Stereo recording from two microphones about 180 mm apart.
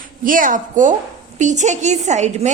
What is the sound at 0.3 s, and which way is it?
A woman's voice, 50° right (ahead or behind).